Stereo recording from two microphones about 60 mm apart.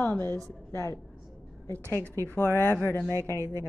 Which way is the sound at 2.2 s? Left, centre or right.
Left.